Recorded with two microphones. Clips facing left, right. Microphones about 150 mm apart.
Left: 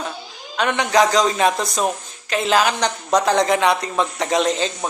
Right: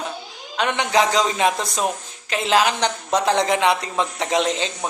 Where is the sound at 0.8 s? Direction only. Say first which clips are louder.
Left 3 dB; 40° left (ahead or behind).